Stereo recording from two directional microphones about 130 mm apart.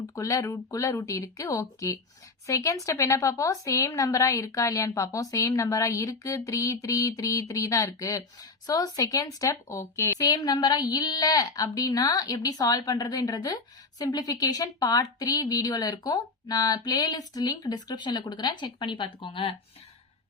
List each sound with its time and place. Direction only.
0.1 s a woman's voice: 25° left (ahead or behind); by 19.5 s 40° left (ahead or behind)